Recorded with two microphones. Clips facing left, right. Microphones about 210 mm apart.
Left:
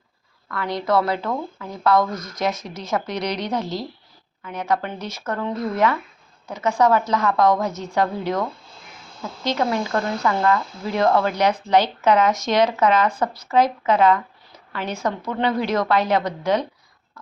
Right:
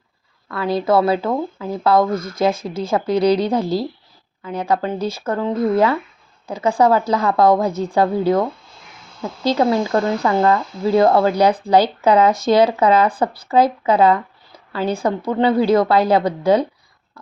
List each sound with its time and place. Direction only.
0.4 s speech: 25° right (ahead or behind)